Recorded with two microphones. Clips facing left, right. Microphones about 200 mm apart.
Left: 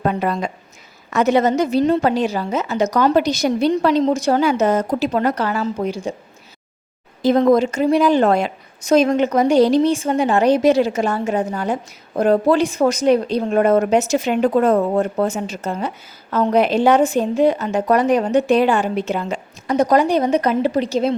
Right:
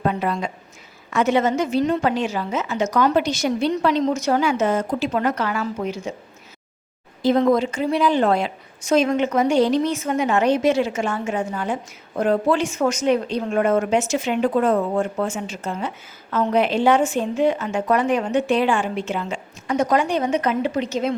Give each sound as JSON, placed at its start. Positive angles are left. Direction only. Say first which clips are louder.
{"t": 0.0, "sound": "a woman's voice", "louder": "left 3 dB", "side_deg": 45}
{"t": 7.2, "sound": "a woman's voice", "louder": "left 3 dB", "side_deg": 45}